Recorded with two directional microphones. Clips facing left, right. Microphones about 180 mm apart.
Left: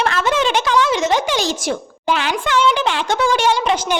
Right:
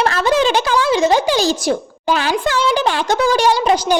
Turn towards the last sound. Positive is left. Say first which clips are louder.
# right 3 dB
turn(degrees=-35)  # may be behind; listen again after turning